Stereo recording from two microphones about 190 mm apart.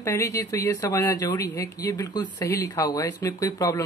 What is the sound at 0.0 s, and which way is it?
Speech, 15° left (ahead or behind).